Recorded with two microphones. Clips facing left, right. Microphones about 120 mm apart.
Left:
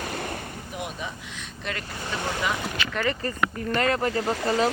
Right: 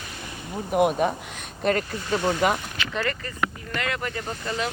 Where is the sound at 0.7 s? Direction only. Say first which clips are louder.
Right 15 dB; 55° right (ahead or behind).